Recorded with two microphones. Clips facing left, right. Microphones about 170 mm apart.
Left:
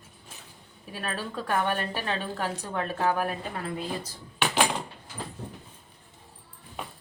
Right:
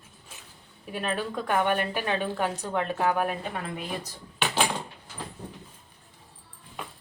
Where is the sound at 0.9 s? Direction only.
20° right (ahead or behind).